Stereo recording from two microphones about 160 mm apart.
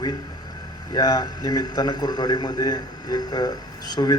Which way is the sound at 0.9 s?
25° left (ahead or behind).